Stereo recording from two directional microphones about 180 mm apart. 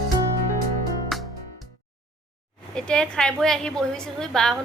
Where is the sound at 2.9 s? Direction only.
5° left (ahead or behind).